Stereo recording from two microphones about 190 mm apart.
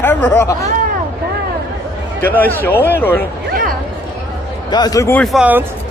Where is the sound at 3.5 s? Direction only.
50° right (ahead or behind).